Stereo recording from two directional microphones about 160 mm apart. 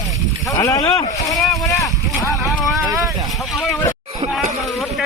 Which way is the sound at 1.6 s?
20° left (ahead or behind).